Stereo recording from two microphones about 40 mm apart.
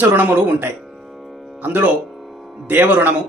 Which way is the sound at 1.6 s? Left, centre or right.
Right.